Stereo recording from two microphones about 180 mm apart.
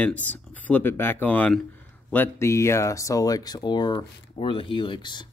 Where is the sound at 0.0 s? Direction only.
10° left (ahead or behind).